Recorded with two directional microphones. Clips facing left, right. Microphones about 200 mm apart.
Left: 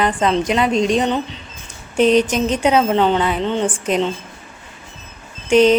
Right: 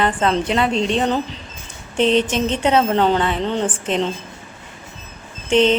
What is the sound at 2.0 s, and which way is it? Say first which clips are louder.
Mantra: left 3 dB; 25° right (ahead or behind).